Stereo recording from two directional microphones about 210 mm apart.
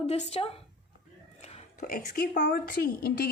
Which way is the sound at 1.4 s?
30° left (ahead or behind).